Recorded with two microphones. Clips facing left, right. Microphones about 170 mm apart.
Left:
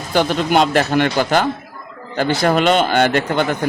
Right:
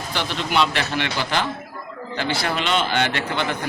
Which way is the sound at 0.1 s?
45° left (ahead or behind).